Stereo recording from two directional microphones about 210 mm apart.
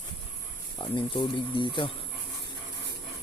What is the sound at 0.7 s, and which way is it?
Speech, 20° left (ahead or behind).